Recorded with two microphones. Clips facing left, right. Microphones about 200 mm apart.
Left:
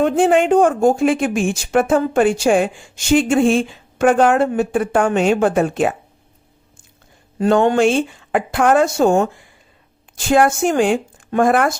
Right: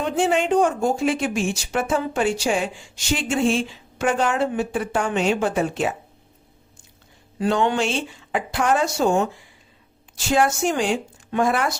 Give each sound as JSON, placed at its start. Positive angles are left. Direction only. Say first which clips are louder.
{"t": 0.0, "sound": "speech", "louder": "left 7 dB", "side_deg": 55}
{"t": 7.3, "sound": "speech", "louder": "left 7 dB", "side_deg": 45}